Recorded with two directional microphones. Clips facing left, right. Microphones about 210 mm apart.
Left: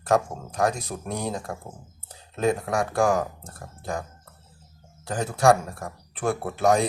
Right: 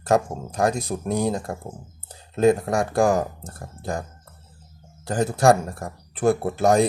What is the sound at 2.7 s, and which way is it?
Speech, 25° right (ahead or behind).